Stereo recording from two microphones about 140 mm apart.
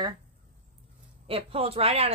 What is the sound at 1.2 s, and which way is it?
Speech, 45° right (ahead or behind).